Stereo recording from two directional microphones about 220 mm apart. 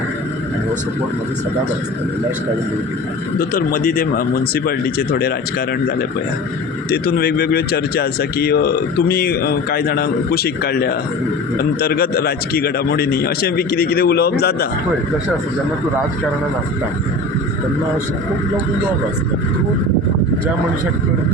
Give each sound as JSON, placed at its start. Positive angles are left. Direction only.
{"t": 3.3, "sound": "speech", "side_deg": 40}
{"t": 6.9, "sound": "speech", "side_deg": 45}